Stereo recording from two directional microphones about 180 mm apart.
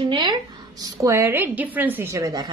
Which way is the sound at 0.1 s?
25° right (ahead or behind).